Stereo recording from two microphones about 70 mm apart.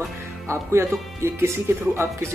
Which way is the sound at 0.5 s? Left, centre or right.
Right.